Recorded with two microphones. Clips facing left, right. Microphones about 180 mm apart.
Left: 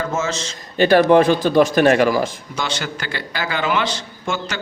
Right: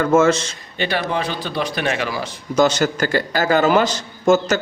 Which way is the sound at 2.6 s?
40° right (ahead or behind).